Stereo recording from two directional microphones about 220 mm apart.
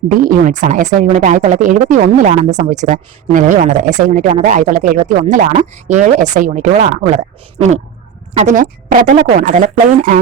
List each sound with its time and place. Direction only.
0.1 s speech: 40° right (ahead or behind)
8.3 s speech: 30° right (ahead or behind)